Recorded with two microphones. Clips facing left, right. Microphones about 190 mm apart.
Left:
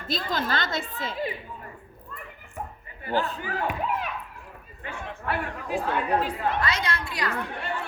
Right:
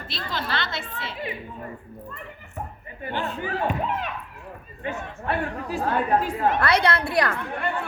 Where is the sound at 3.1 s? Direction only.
40° left (ahead or behind).